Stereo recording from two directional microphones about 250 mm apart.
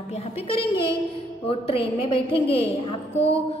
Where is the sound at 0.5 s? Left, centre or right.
Left.